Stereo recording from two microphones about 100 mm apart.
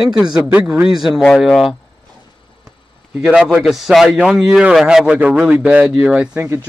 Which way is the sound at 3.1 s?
5° right (ahead or behind).